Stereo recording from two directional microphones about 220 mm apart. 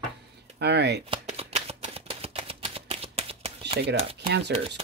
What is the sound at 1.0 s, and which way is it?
Shuffling cards, 30° right (ahead or behind).